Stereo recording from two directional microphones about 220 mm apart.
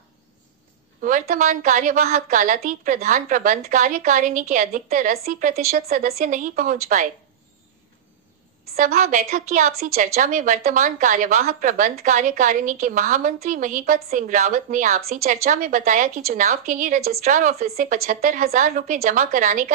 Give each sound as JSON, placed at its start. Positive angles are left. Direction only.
{"t": 1.0, "sound": "a woman's voice", "side_deg": -35}
{"t": 8.7, "sound": "a woman's voice", "side_deg": -35}